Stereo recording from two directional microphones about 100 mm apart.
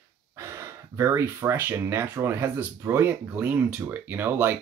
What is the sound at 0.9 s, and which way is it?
Speech, 25° right (ahead or behind).